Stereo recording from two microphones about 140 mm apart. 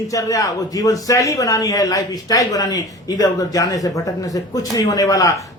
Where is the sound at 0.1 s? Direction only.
25° left (ahead or behind).